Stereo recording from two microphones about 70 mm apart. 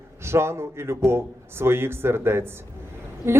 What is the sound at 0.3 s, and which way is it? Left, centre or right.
Speech, right.